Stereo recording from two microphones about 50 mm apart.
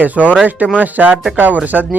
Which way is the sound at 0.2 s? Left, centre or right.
Centre.